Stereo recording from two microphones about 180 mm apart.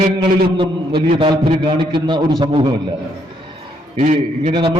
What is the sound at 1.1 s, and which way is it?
A man's voice, 30° right (ahead or behind).